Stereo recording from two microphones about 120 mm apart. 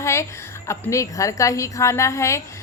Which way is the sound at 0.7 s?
25° left (ahead or behind).